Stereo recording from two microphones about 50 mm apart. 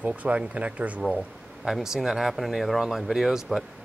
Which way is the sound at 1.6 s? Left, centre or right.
Centre.